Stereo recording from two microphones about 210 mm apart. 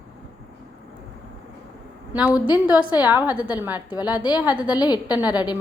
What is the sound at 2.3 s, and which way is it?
Speech, 20° left (ahead or behind).